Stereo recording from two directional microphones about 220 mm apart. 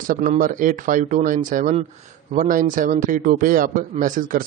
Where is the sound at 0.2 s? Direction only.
35° right (ahead or behind).